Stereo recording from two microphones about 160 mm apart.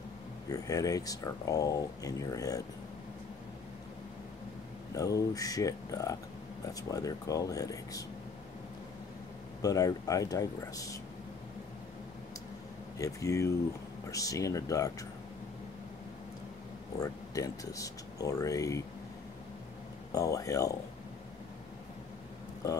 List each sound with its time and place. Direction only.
0.5 s speech: 20° left (ahead or behind)
4.9 s speech: 20° left (ahead or behind)
9.6 s speech: 20° left (ahead or behind)
13.0 s speech: 20° left (ahead or behind)
17.0 s speech: 20° left (ahead or behind)
20.1 s speech: 20° left (ahead or behind)